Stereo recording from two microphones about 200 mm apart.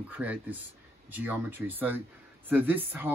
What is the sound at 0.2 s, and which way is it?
Speech, 5° right (ahead or behind).